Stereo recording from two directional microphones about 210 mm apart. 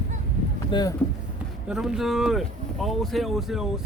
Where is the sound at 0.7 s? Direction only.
20° left (ahead or behind).